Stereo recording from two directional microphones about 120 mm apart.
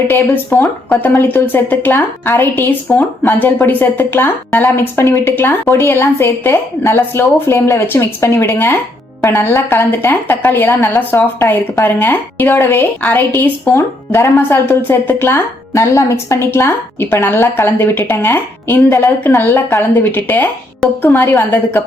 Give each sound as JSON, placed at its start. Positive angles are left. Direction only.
{"t": 0.1, "sound": "a woman's voice", "side_deg": 20}